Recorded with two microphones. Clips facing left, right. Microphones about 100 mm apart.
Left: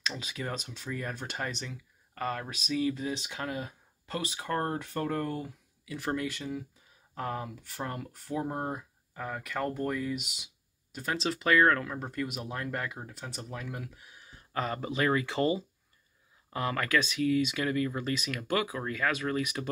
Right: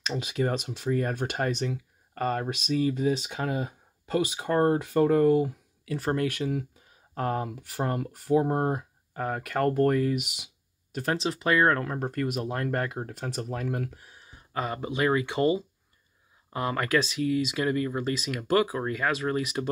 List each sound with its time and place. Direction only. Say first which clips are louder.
0.2 s speech: right 9 dB; 65° right (ahead or behind)
3.1 s speech: right 7 dB; 45° right (ahead or behind)
4.0 s speech: right 9 dB; 85° right
5.9 s speech: right 5 dB; 45° right (ahead or behind)
6.2 s speech: right 7 dB; 70° right (ahead or behind)
11.2 s speech: even; 25° right (ahead or behind)
11.8 s speech: right 5 dB; 45° right (ahead or behind)
14.2 s a sound: right 2 dB; 20° right (ahead or behind)
15.0 s speech: right 3 dB; 20° right (ahead or behind)